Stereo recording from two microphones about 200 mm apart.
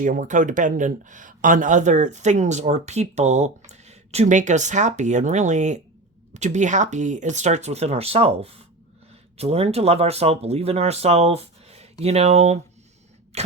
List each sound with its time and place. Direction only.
0.0 s speech: 40° right (ahead or behind)
13.3 s cough: 30° right (ahead or behind)